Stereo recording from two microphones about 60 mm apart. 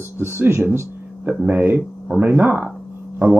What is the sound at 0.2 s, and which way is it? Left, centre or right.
Speech, right.